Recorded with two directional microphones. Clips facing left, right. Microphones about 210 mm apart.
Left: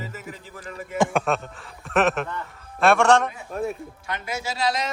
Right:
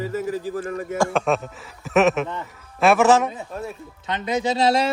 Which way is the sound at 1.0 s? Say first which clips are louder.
Even; 15° left (ahead or behind).